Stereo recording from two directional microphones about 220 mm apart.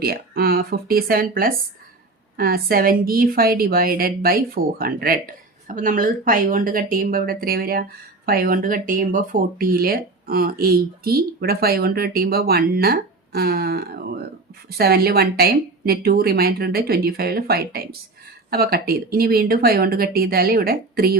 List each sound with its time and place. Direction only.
0.0 s a woman's voice: 45° right (ahead or behind)